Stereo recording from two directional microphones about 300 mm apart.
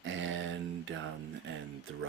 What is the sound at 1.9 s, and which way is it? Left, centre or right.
Speech, right.